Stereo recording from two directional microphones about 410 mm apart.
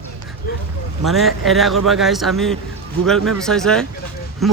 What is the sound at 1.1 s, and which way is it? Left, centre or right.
A man's voice, centre.